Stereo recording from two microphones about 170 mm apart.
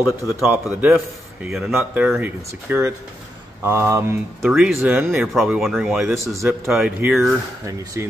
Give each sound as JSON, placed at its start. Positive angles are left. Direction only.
{"t": 0.4, "sound": "speech", "side_deg": -10}
{"t": 4.5, "sound": "speech", "side_deg": 0}
{"t": 4.7, "sound": "speech", "side_deg": -15}
{"t": 5.3, "sound": "speech", "side_deg": 0}
{"t": 6.2, "sound": "speech", "side_deg": -15}
{"t": 6.7, "sound": "speech", "side_deg": -5}